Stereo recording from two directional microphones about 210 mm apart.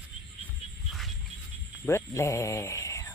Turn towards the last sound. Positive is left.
turn(degrees=15)  # may be behind; listen again after turning